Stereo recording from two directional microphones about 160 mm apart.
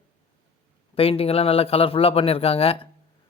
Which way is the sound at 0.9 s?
35° left (ahead or behind).